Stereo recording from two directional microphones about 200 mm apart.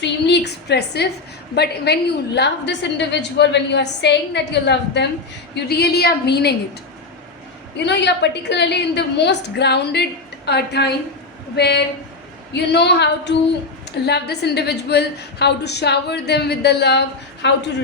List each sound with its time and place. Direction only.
0.0 s a woman's voice: 60° left (ahead or behind)
7.8 s a woman's voice: 60° left (ahead or behind)